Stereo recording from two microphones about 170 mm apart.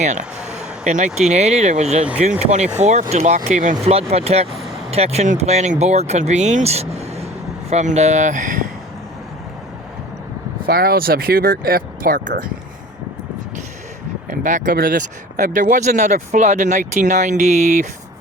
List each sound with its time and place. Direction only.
0.0 s speech: 45° right (ahead or behind)
10.7 s speech: 60° right (ahead or behind)
14.3 s speech: 50° right (ahead or behind)